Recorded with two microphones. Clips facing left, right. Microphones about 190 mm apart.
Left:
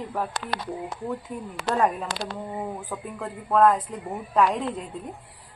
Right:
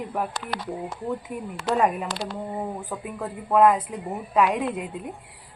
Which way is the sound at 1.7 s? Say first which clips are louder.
Right 1 dB; 5° right (ahead or behind).